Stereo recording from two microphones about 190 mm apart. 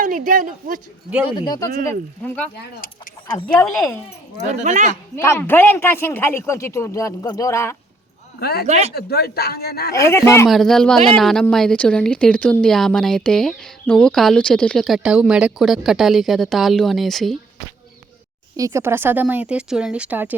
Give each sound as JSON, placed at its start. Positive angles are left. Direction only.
{"t": 0.0, "sound": "a woman's voice", "side_deg": -45}
{"t": 1.4, "sound": "speech", "side_deg": 20}
{"t": 2.2, "sound": "speech", "side_deg": 5}
{"t": 4.4, "sound": "speech", "side_deg": -40}
{"t": 5.1, "sound": "speech", "side_deg": 15}
{"t": 8.4, "sound": "speech", "side_deg": 55}
{"t": 8.6, "sound": "speech", "side_deg": -35}
{"t": 8.9, "sound": "speech", "side_deg": 55}
{"t": 10.0, "sound": "speech", "side_deg": 15}
{"t": 10.5, "sound": "a woman's voice", "side_deg": 0}
{"t": 18.5, "sound": "speech", "side_deg": -15}